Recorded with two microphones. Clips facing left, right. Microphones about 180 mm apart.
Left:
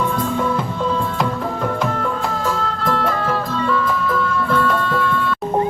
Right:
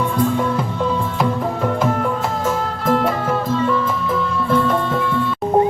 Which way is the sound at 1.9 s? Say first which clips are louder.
Right 2 dB; 15° right (ahead or behind).